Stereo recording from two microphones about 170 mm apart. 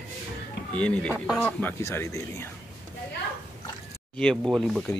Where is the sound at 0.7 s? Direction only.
10° left (ahead or behind).